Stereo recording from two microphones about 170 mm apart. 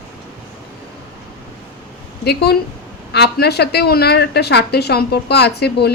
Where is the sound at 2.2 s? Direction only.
75° left (ahead or behind).